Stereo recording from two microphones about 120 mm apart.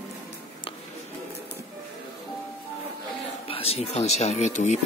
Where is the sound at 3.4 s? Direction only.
55° left (ahead or behind); by 4.7 s 75° left (ahead or behind).